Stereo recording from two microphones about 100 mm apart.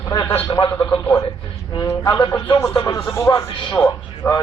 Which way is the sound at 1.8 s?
35° left (ahead or behind).